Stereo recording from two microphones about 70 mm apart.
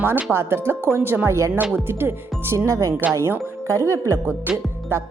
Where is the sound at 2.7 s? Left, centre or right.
Right.